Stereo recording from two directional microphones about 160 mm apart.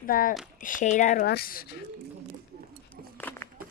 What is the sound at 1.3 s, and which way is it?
Speech, 70° left (ahead or behind).